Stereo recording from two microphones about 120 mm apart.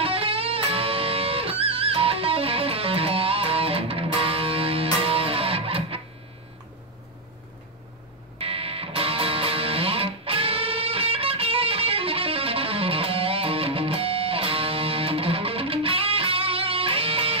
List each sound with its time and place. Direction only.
0.0 s music: 50° right (ahead or behind)
8.4 s music: 50° right (ahead or behind)